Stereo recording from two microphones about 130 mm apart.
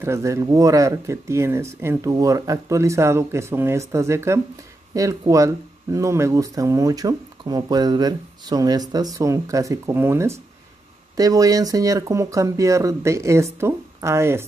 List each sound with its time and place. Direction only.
0.0 s speech: 20° right (ahead or behind)